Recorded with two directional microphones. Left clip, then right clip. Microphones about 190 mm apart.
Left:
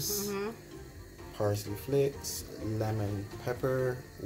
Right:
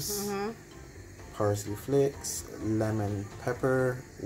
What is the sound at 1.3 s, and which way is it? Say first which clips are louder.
Speech: right 3 dB; 30° right (ahead or behind).